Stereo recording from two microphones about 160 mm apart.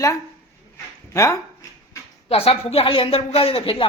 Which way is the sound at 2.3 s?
35° left (ahead or behind).